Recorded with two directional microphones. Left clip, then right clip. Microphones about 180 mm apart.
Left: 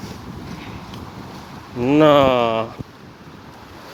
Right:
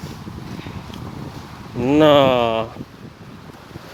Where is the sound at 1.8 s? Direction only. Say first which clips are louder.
Even; 25° right (ahead or behind).